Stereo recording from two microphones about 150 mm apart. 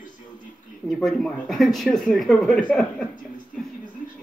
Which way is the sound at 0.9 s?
Centre (ahead or behind).